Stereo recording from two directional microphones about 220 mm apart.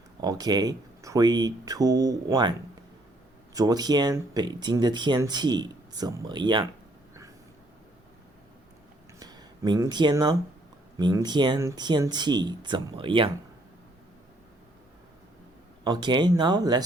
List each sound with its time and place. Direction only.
0.2 s speech: 20° right (ahead or behind)
9.1 s a sound: 15° right (ahead or behind)
10.9 s speech: 15° right (ahead or behind)
15.8 s speech: 20° right (ahead or behind)